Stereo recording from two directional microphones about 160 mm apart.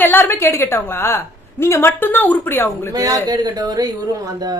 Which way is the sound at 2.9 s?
25° right (ahead or behind).